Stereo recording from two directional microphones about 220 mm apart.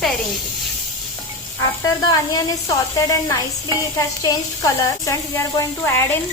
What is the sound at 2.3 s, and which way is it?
A woman's voice, 15° left (ahead or behind).